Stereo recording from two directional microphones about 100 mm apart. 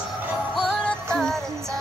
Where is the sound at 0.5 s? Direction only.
5° left (ahead or behind).